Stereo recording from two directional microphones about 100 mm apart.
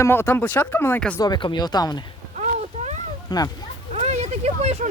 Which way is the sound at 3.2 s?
40° left (ahead or behind).